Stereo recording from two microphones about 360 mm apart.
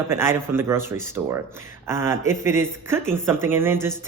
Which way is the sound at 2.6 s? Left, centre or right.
Centre.